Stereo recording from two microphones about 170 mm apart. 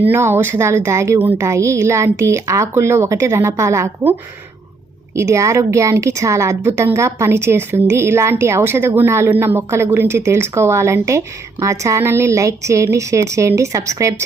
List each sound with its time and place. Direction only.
0.0 s a woman's voice: 10° right (ahead or behind)
5.1 s a woman's voice: 15° right (ahead or behind)